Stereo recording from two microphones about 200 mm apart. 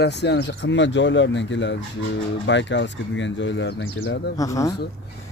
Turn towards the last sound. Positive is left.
turn(degrees=15)  # may be behind; listen again after turning